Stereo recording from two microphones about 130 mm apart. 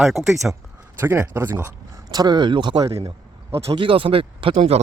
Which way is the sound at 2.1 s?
30° right (ahead or behind).